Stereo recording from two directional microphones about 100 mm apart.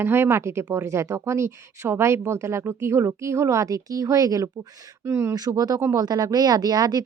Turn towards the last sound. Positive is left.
turn(degrees=-40)  # may be behind; listen again after turning